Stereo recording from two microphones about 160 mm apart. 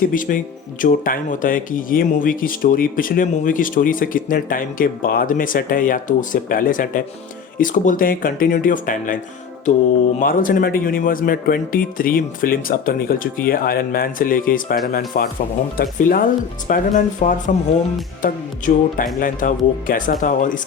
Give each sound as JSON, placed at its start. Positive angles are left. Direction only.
{"t": 0.0, "sound": "speech", "side_deg": 55}
{"t": 10.2, "sound": "speech", "side_deg": 60}